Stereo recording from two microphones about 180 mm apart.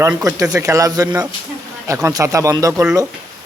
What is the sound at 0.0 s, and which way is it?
A man's voice, 15° right (ahead or behind).